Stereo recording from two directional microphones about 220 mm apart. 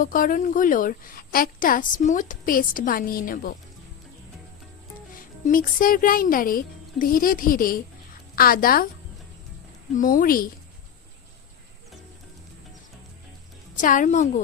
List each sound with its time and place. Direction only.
0.0 s a woman's voice: 40° left (ahead or behind)
5.5 s a woman's voice: 40° left (ahead or behind)
9.9 s a woman's voice: 40° left (ahead or behind)
13.7 s a woman's voice: 35° left (ahead or behind)